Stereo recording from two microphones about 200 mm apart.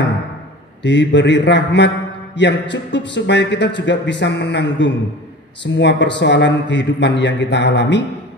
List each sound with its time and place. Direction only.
0.8 s a man's voice: 60° left (ahead or behind)